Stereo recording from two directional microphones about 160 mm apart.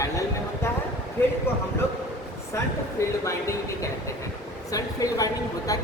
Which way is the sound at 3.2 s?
20° left (ahead or behind).